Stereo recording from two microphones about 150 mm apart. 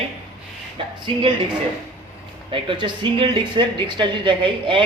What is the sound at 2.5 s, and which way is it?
Speech, 35° right (ahead or behind).